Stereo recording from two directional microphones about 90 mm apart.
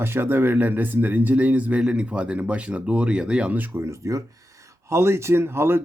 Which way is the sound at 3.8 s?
35° right (ahead or behind).